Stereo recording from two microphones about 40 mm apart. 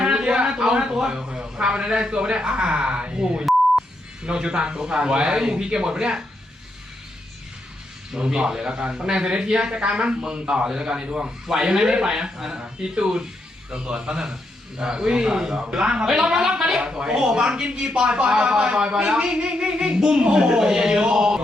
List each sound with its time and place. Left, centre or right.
0.0 s a sound: right
1.3 s speech: right
8.3 s speech: centre